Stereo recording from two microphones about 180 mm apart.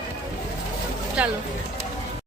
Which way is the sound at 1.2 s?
5° right (ahead or behind).